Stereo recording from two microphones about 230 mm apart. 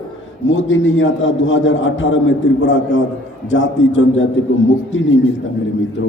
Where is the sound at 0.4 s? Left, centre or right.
Left.